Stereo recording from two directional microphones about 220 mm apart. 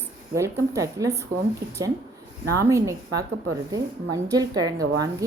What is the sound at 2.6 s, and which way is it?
A woman's voice, 15° right (ahead or behind).